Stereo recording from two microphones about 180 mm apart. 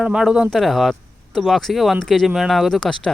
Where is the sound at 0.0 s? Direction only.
5° right (ahead or behind).